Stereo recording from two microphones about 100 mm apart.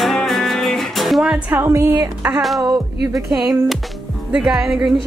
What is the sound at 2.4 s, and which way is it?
A woman's voice, centre (ahead or behind).